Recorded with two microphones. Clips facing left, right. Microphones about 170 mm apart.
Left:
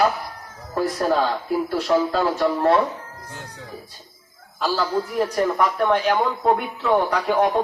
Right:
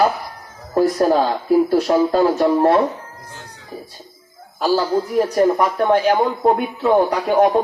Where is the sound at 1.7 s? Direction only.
45° right (ahead or behind).